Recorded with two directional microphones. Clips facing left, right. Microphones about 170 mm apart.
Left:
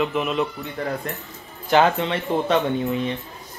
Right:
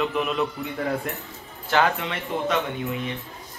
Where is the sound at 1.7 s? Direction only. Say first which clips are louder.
Left 5 dB; 25° left (ahead or behind).